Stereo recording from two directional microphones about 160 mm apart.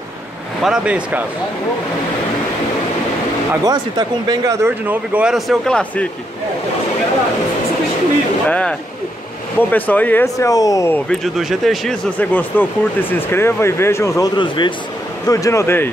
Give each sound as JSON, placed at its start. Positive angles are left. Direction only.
{"t": 0.6, "sound": "speech", "side_deg": -5}
{"t": 3.6, "sound": "speech", "side_deg": -25}
{"t": 8.5, "sound": "speech", "side_deg": 10}
{"t": 11.1, "sound": "speech", "side_deg": 0}